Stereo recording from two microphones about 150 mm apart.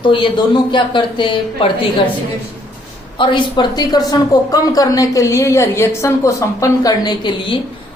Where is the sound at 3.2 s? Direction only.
35° left (ahead or behind).